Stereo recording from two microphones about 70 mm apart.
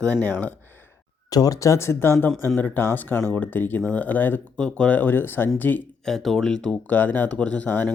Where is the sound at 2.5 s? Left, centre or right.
Left.